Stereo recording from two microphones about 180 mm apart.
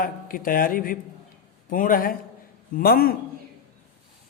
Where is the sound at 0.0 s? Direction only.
50° left (ahead or behind).